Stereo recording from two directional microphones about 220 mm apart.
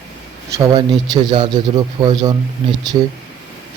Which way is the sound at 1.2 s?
20° right (ahead or behind).